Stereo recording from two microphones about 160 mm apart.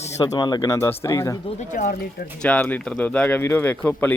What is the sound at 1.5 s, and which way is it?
Speech, 50° left (ahead or behind).